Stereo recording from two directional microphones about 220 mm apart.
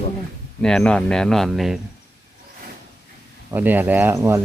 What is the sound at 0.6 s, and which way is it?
A man's voice, 5° left (ahead or behind).